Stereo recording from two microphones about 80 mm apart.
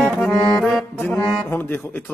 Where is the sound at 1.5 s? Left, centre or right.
Left.